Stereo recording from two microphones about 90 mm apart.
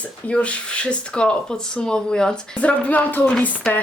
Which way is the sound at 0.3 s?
15° left (ahead or behind).